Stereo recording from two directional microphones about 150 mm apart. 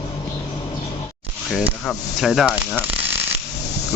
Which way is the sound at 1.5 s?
Centre (ahead or behind).